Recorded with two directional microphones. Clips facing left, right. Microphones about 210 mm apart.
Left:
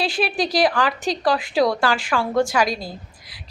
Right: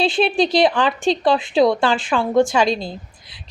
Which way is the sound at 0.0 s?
25° right (ahead or behind).